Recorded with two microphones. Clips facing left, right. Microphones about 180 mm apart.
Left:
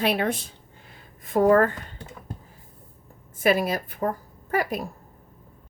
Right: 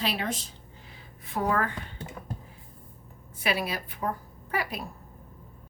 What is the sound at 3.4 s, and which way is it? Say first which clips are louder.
A woman's voice: left 8 dB; 45° left (ahead or behind).